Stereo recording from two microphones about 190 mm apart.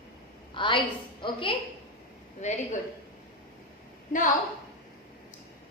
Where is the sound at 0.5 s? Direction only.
25° left (ahead or behind).